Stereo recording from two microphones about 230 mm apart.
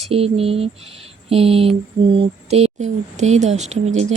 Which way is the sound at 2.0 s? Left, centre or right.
Right.